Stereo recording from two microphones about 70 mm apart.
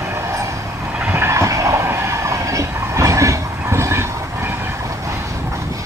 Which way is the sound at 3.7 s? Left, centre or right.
Right.